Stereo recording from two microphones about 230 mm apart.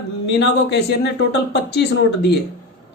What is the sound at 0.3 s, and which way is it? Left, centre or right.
Speech, left.